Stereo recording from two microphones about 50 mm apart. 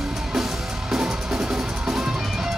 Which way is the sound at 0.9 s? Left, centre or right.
Centre.